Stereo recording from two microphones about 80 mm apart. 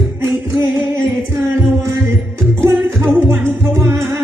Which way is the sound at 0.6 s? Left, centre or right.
Right.